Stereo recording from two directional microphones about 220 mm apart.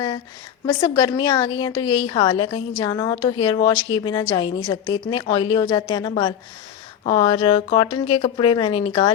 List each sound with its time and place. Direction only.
0.6 s a woman's voice: 20° left (ahead or behind)